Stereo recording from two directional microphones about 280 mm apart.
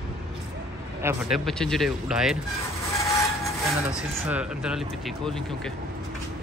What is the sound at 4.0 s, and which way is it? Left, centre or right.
Speech, centre.